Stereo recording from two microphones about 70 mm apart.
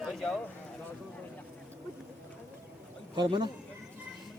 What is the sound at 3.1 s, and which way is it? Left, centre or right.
Speech, right.